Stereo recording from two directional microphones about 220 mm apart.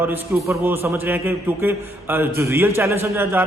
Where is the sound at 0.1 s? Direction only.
10° right (ahead or behind).